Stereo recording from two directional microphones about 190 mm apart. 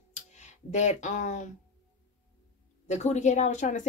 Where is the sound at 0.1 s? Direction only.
40° left (ahead or behind).